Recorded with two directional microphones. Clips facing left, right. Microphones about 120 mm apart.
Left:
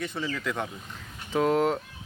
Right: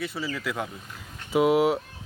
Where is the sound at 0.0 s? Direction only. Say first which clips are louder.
Even; 5° right (ahead or behind).